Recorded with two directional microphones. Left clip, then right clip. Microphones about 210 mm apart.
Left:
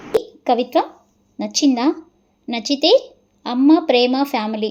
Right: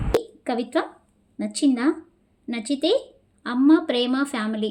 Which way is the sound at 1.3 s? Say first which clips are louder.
Left 5 dB; 5° left (ahead or behind).